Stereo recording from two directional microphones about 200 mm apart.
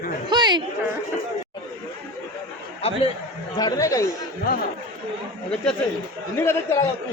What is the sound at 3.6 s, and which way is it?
Speech, 15° left (ahead or behind).